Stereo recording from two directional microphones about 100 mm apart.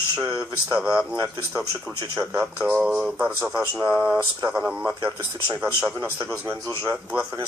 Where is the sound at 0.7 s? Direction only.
10° right (ahead or behind).